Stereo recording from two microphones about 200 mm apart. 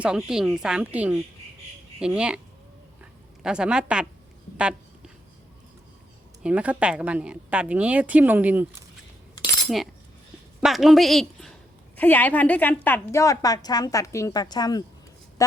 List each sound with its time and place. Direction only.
0.0 s speech: 5° right (ahead or behind)
3.0 s a sound: 5° right (ahead or behind)
6.4 s a woman's voice: 5° right (ahead or behind)
9.6 s a woman's voice: centre (ahead or behind); by 15.5 s 15° left (ahead or behind)